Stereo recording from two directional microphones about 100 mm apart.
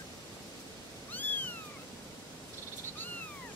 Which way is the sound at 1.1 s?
20° left (ahead or behind).